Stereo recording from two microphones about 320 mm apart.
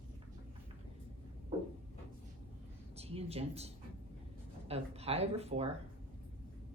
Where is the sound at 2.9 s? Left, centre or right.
Centre.